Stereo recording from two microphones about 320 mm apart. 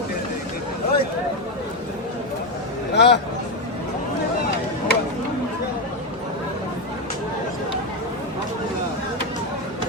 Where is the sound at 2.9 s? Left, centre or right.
Left.